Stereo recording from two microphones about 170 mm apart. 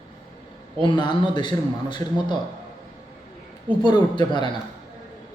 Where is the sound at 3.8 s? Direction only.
25° left (ahead or behind).